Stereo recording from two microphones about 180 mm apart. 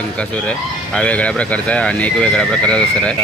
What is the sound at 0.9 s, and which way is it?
Speech, 5° left (ahead or behind).